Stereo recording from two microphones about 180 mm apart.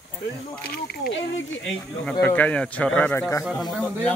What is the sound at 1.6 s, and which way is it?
Speech, 10° left (ahead or behind).